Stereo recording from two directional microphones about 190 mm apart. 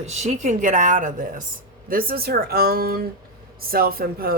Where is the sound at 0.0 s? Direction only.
35° right (ahead or behind).